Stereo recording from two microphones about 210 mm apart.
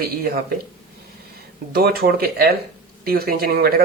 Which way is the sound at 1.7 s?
45° right (ahead or behind).